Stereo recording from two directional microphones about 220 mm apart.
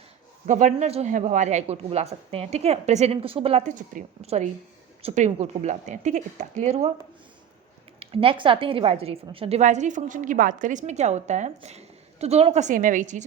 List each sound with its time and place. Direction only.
0.4 s a woman's voice: 35° right (ahead or behind)
7.9 s a woman's voice: 25° right (ahead or behind)